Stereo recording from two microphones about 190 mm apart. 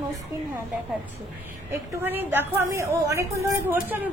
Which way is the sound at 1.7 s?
10° right (ahead or behind).